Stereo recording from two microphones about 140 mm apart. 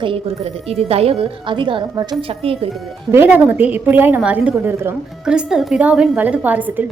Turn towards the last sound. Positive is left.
turn(degrees=-10)  # may be behind; listen again after turning